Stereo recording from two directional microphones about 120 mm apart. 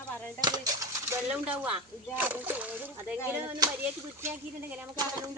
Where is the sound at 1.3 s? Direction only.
10° right (ahead or behind).